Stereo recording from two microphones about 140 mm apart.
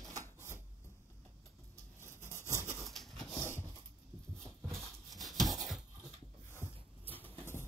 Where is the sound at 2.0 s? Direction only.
15° left (ahead or behind).